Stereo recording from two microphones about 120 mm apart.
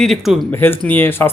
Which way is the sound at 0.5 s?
20° left (ahead or behind).